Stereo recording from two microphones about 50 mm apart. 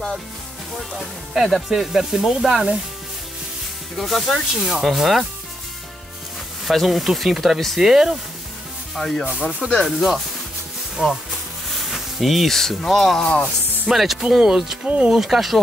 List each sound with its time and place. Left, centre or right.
0.7 s speech: centre
3.9 s speech: centre
6.7 s speech: centre
8.9 s speech: centre
9.4 s speech: centre
9.8 s speech: centre
11.0 s speech: centre
11.7 s speech: centre